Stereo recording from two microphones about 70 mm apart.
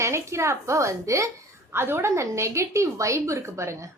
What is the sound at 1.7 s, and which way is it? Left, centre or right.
A woman's voice, right.